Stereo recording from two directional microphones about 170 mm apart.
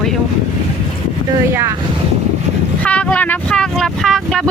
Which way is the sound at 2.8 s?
5° left (ahead or behind).